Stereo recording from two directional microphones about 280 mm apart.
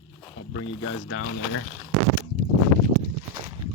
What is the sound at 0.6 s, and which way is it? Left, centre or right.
Speech, left.